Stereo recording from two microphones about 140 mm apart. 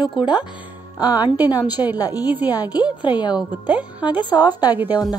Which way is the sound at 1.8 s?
30° left (ahead or behind).